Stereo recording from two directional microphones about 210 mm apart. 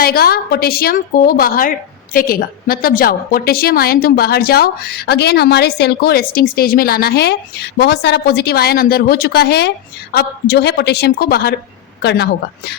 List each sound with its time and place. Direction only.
0.0 s a woman's voice: 45° left (ahead or behind)